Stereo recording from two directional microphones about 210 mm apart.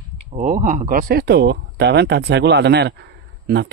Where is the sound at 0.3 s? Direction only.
35° right (ahead or behind).